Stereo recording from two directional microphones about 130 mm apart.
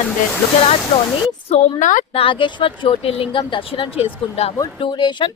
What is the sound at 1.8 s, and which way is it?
Speech, 75° left (ahead or behind).